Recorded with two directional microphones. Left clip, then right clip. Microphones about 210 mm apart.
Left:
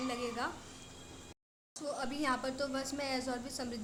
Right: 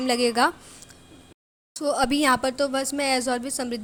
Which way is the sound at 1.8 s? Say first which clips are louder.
Right 15 dB; 40° right (ahead or behind).